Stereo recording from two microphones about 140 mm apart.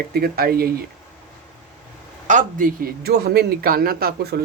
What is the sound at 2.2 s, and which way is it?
A man's voice, 70° right (ahead or behind).